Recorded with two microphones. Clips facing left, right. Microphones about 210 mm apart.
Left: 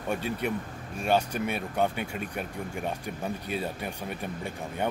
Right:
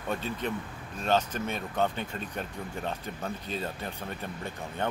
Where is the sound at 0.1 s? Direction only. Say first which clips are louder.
Left 2 dB; 10° left (ahead or behind).